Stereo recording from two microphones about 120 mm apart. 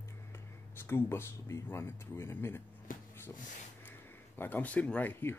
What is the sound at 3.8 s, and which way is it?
Speech, 15° left (ahead or behind).